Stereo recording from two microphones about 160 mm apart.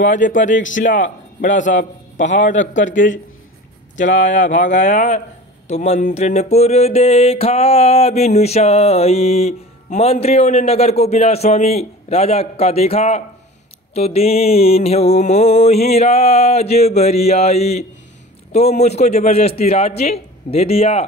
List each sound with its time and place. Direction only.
0.0 s a man's voice: 55° left (ahead or behind)
5.7 s music: 45° left (ahead or behind)
18.5 s a man's voice: 40° left (ahead or behind)
19.3 s music: 40° left (ahead or behind)